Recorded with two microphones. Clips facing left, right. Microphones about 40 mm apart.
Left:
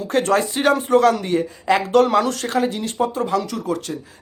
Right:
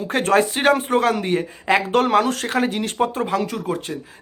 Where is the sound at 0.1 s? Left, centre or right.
Right.